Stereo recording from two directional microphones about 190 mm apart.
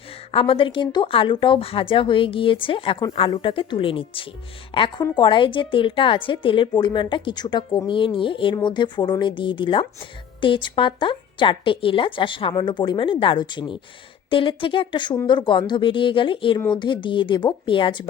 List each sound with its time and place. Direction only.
0.3 s speech: 30° left (ahead or behind)